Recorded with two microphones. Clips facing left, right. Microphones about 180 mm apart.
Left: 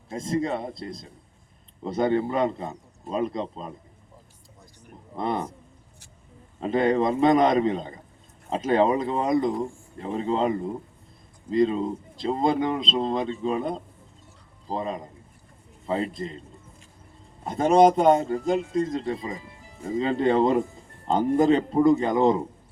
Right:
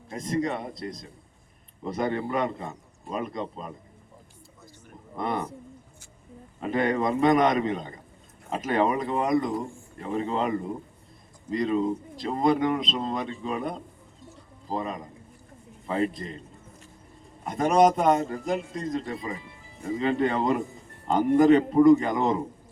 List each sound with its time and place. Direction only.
0.1 s speech: 25° left (ahead or behind)
5.1 s speech: 25° left (ahead or behind)
6.6 s speech: 25° left (ahead or behind)
11.5 s speech: 25° left (ahead or behind)
17.4 s speech: 25° left (ahead or behind)